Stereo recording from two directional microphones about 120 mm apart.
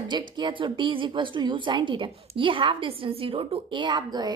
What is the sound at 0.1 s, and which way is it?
A woman's voice, 40° right (ahead or behind).